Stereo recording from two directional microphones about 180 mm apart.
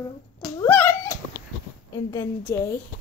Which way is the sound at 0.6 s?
10° left (ahead or behind).